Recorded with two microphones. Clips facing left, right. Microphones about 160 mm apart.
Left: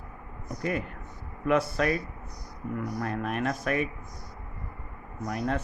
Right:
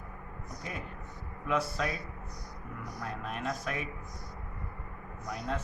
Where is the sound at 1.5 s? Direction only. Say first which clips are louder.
Left 7 dB; 60° left (ahead or behind).